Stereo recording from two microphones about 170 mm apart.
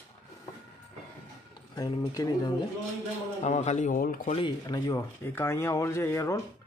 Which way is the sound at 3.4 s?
45° left (ahead or behind).